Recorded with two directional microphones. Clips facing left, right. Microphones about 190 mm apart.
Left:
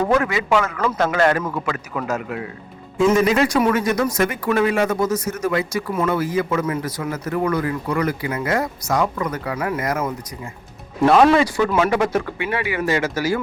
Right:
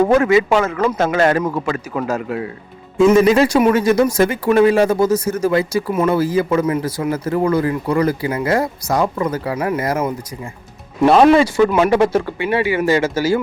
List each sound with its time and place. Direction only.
0.0 s speech: 25° right (ahead or behind)